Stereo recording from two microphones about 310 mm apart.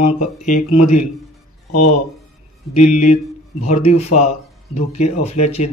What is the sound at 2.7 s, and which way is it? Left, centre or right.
A man's voice, left.